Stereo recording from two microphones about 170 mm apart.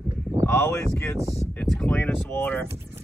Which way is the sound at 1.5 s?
5° left (ahead or behind).